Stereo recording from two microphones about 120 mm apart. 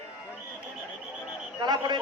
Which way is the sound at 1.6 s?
40° right (ahead or behind).